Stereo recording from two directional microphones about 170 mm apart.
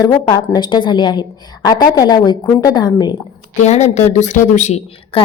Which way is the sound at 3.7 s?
40° left (ahead or behind).